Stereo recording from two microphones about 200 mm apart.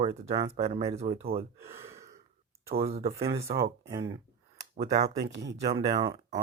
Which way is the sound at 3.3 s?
30° right (ahead or behind).